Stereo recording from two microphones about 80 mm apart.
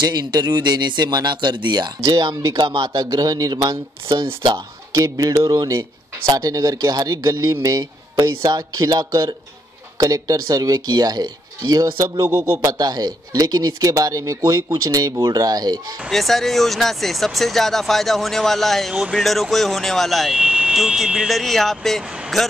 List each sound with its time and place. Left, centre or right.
0.0 s speech: right
4.9 s speech: right
12.2 s speech: right
12.6 s speech: right
16.1 s speech: centre